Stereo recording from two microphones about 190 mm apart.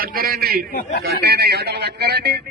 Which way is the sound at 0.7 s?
50° left (ahead or behind).